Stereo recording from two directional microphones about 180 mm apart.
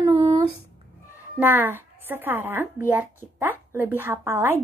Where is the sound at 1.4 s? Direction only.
10° right (ahead or behind).